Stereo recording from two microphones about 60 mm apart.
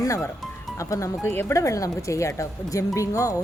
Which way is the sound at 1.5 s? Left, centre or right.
Left.